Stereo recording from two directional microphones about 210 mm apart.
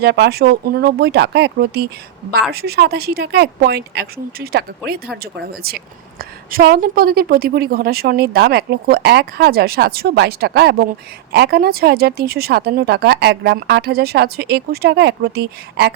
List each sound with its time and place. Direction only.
0.0 s a woman's voice: 50° right (ahead or behind)